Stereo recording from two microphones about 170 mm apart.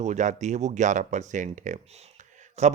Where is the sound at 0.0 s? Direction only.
45° right (ahead or behind).